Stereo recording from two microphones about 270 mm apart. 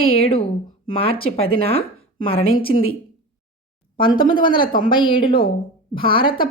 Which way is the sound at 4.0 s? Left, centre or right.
Centre.